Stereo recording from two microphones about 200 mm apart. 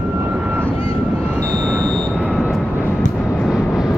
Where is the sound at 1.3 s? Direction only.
15° right (ahead or behind).